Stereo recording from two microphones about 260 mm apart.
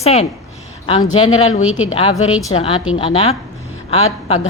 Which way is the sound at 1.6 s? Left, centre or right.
Left.